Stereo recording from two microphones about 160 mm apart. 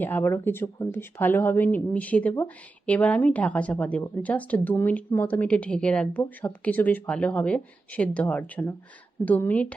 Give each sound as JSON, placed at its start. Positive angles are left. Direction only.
{"t": 0.0, "sound": "speech", "side_deg": 10}